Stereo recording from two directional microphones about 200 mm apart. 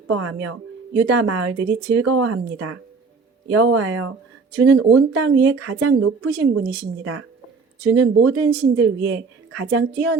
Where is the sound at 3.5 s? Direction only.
80° right.